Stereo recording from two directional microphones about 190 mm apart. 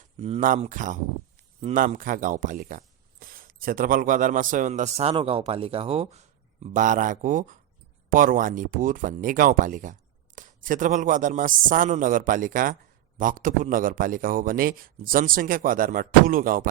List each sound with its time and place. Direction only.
0.2 s speech: 40° right (ahead or behind)